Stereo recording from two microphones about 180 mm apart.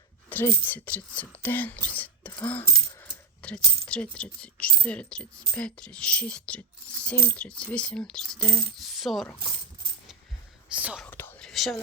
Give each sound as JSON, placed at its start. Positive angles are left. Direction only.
{"t": 0.3, "sound": "speech", "side_deg": 10}
{"t": 3.1, "sound": "coin", "side_deg": 5}
{"t": 3.8, "sound": "speech", "side_deg": 5}
{"t": 10.8, "sound": "speech", "side_deg": -10}
{"t": 11.0, "sound": "whispering", "side_deg": 10}
{"t": 11.4, "sound": "whispering", "side_deg": 0}